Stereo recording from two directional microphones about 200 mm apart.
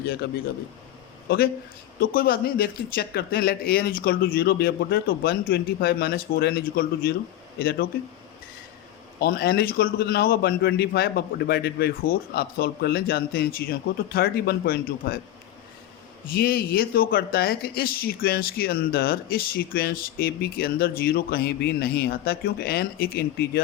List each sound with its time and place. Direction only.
0.2 s speech: 50° left (ahead or behind)
2.0 s speech: 45° left (ahead or behind)
9.2 s speech: 50° left (ahead or behind)
16.3 s speech: 50° left (ahead or behind)